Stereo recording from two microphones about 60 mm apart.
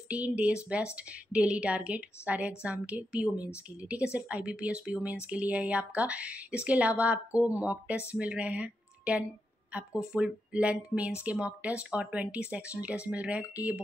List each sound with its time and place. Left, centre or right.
0.1 s a woman's voice: right